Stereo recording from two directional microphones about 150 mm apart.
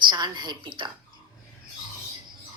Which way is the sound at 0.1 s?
30° right (ahead or behind).